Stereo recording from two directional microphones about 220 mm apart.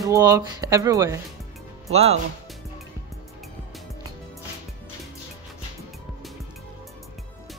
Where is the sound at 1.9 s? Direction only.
30° right (ahead or behind).